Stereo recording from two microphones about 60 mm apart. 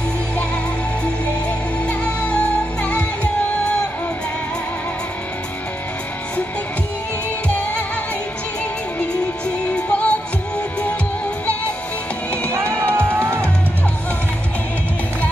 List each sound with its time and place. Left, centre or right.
1.9 s music: left
9.7 s music: left
12.8 s music: right